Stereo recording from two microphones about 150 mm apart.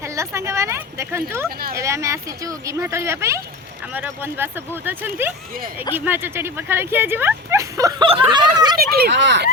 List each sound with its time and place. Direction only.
0.0 s speech: 20° right (ahead or behind)
8.0 s speech: 35° right (ahead or behind)
8.8 s speech: 90° right